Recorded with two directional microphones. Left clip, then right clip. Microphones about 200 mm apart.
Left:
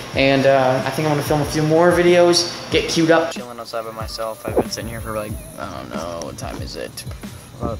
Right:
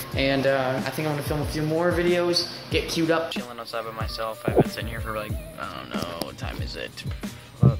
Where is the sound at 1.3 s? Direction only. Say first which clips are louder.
Left 9 dB; 10° left (ahead or behind).